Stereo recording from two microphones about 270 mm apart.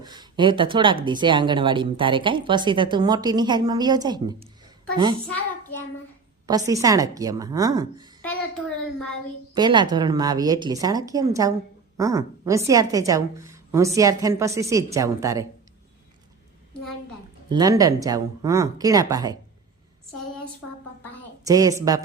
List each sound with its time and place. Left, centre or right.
0.0 s speech: centre
6.7 s speech: centre
9.6 s speech: centre
17.5 s speech: centre
21.4 s speech: centre